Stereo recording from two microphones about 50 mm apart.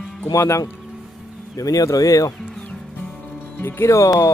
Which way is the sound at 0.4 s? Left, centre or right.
Left.